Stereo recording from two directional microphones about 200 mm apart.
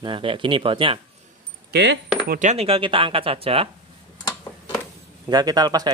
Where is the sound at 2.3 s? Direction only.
40° right (ahead or behind).